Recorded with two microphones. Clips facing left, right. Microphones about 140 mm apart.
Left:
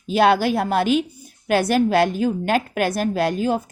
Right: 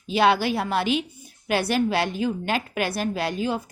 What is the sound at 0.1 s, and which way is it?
A woman's voice, 50° left (ahead or behind).